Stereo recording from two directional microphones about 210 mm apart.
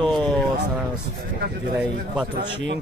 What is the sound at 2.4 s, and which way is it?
Speech, 55° right (ahead or behind).